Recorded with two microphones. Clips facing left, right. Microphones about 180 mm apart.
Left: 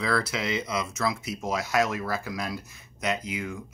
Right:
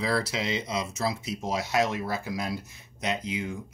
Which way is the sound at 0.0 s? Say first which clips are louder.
Even; 30° right (ahead or behind).